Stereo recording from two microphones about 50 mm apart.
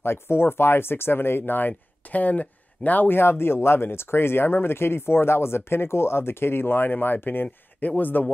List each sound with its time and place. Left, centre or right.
0.0 s speech: left